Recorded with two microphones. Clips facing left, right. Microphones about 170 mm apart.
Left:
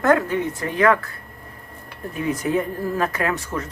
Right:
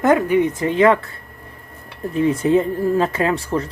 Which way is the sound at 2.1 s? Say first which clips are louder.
Right 7 dB; 30° right (ahead or behind).